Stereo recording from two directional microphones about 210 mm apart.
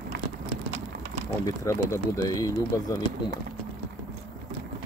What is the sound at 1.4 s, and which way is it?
Speech, 15° left (ahead or behind).